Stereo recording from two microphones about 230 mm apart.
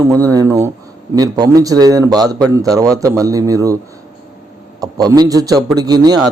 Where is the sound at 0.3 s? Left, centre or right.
Centre.